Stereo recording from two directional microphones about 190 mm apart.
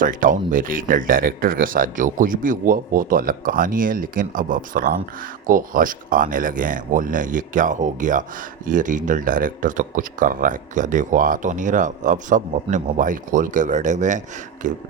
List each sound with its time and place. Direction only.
0.0 s speech: 45° right (ahead or behind)